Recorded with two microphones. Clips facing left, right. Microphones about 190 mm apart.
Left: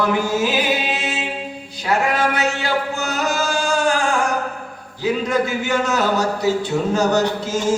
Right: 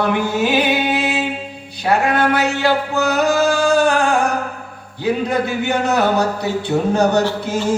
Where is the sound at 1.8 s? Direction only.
60° right (ahead or behind).